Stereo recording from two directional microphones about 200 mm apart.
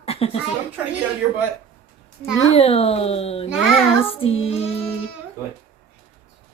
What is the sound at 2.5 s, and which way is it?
Speech, 30° left (ahead or behind).